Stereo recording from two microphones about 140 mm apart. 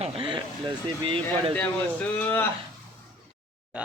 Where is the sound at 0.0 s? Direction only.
40° right (ahead or behind).